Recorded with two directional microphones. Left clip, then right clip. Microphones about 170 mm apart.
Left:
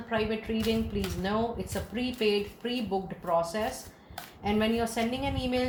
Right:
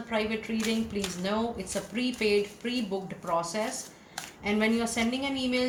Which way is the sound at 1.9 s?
40° left (ahead or behind).